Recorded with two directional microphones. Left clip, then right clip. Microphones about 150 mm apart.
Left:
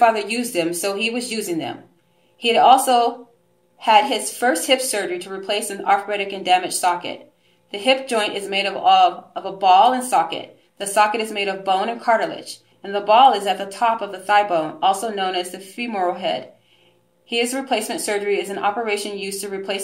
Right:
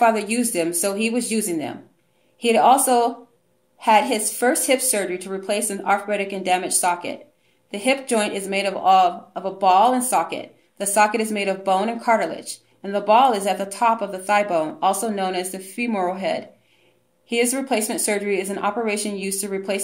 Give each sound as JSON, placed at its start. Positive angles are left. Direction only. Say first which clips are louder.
{"t": 0.0, "sound": "speech", "louder": "left 2 dB", "side_deg": -30}